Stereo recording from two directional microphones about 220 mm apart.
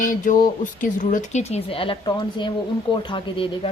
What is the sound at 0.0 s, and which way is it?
Speech, 35° left (ahead or behind).